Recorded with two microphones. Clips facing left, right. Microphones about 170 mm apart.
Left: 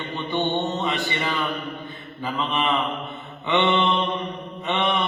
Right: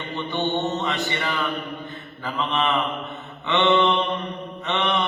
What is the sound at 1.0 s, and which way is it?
A man's voice, 15° left (ahead or behind).